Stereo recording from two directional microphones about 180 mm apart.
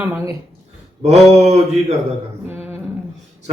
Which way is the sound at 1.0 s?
40° right (ahead or behind).